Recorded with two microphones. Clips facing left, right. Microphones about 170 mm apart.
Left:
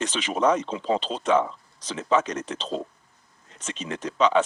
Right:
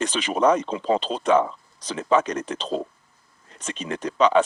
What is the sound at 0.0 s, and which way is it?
Speech, 55° right (ahead or behind).